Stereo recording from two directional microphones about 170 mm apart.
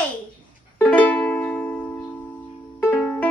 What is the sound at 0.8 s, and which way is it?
Music, 10° left (ahead or behind).